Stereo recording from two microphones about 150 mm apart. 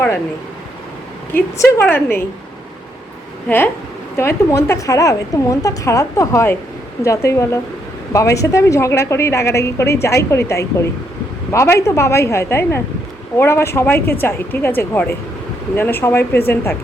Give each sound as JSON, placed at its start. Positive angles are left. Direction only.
{"t": 1.5, "sound": "a woman's voice", "side_deg": 15}
{"t": 4.2, "sound": "a woman's voice", "side_deg": 15}